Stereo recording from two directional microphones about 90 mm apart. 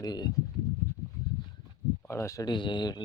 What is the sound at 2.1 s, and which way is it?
Speech, 30° left (ahead or behind).